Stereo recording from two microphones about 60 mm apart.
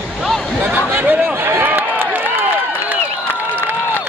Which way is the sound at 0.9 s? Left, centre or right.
Right.